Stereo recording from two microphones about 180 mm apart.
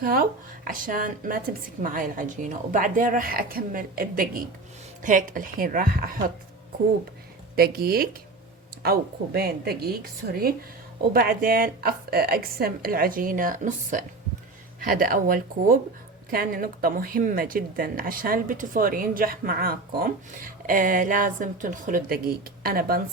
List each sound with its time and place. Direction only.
0.0 s speech: 55° right (ahead or behind)
7.5 s a woman's voice: 55° right (ahead or behind)